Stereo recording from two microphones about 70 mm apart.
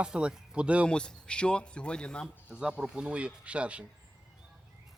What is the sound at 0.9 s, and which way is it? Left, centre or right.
Speech, centre.